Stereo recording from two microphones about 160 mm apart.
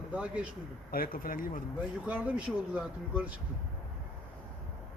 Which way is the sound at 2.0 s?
10° right (ahead or behind).